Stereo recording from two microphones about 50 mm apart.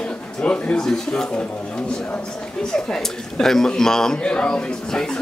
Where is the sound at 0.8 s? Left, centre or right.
Centre.